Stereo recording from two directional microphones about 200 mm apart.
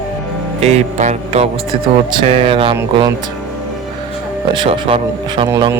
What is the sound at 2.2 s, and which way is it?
Speech, 30° right (ahead or behind).